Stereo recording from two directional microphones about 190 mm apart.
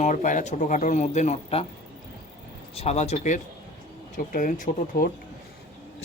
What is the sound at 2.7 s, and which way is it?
Speech, 35° left (ahead or behind).